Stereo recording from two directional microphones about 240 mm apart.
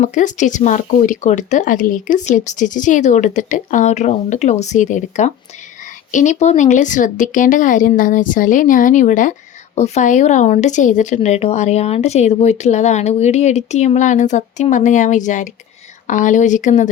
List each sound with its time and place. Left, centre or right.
0.0 s speech: left